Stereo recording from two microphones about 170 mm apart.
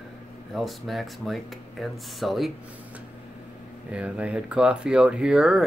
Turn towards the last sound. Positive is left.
turn(degrees=-5)  # may be behind; listen again after turning